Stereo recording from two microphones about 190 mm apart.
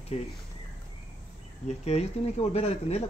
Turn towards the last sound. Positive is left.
turn(degrees=35)  # may be behind; listen again after turning